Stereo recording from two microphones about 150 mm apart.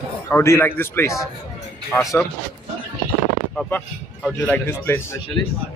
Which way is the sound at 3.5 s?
10° left (ahead or behind).